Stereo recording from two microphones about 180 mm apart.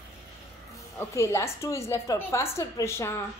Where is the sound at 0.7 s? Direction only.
15° left (ahead or behind).